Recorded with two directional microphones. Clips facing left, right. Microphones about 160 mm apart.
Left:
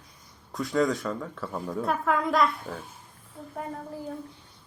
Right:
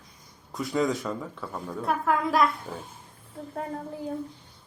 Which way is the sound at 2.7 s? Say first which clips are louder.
Even; 15° right (ahead or behind).